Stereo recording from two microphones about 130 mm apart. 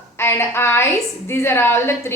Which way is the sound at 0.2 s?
20° left (ahead or behind).